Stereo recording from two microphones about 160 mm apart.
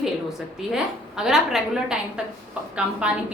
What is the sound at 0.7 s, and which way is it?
A woman's voice, 5° right (ahead or behind).